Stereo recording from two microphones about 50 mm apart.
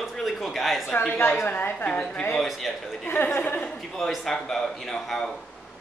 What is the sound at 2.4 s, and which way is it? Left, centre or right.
Speech, centre.